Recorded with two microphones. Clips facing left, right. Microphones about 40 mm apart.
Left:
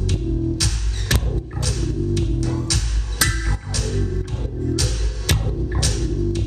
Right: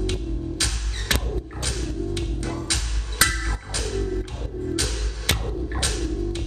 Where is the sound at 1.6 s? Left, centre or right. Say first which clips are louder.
Left 6 dB; right.